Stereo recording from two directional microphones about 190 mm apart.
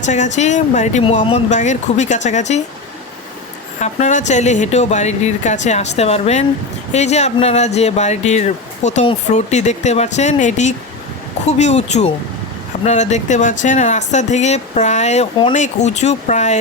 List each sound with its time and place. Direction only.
0.0 s speech: 40° left (ahead or behind)
3.8 s speech: 40° left (ahead or behind)